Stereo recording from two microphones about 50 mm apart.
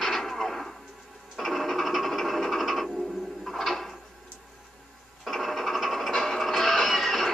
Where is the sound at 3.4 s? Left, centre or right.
Centre.